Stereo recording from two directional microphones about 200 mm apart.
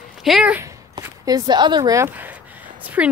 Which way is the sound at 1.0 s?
20° right (ahead or behind).